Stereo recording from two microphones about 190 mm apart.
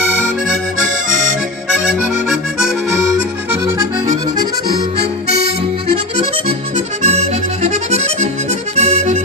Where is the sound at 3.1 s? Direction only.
15° right (ahead or behind).